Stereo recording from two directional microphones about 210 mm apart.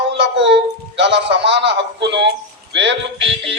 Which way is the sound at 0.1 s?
55° right (ahead or behind).